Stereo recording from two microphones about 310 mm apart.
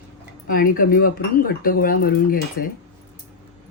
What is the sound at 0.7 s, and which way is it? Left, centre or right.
Speech, left.